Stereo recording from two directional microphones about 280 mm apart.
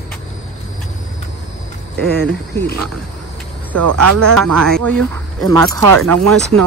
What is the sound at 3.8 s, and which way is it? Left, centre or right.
Speech, right.